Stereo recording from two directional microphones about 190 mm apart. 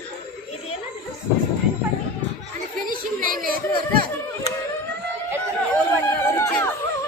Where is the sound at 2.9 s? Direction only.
50° right (ahead or behind).